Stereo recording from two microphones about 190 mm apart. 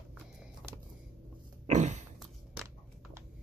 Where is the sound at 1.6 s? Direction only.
40° right (ahead or behind).